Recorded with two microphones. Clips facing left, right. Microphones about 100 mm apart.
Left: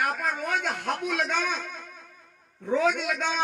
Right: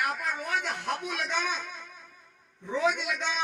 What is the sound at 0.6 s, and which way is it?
Speech, 55° left (ahead or behind).